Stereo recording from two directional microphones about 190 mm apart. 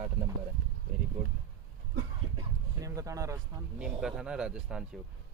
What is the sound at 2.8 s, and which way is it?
Speech, 15° right (ahead or behind).